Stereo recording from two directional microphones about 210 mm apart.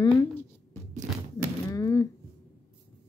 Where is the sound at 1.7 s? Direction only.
15° left (ahead or behind).